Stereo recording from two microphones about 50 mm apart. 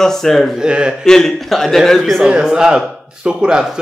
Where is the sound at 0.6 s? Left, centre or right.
Centre.